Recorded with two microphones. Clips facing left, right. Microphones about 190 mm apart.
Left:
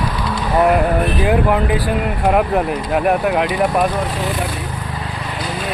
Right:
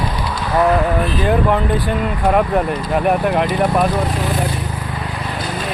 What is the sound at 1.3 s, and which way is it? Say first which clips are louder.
Speech: even; 5° left (ahead or behind).